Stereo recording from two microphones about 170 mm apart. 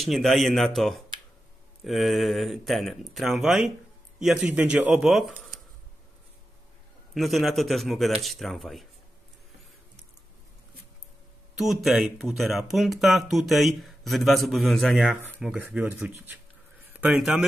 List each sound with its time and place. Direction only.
0.0 s speech: centre (ahead or behind)
7.2 s speech: centre (ahead or behind)
11.5 s speech: centre (ahead or behind)